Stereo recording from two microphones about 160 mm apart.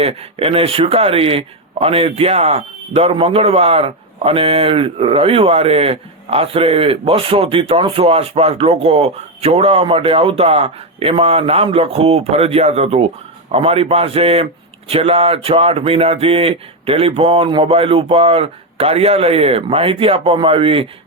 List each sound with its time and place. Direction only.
0.0 s speech: 35° right (ahead or behind)